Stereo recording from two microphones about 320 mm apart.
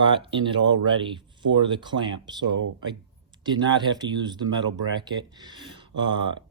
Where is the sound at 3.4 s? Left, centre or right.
Centre.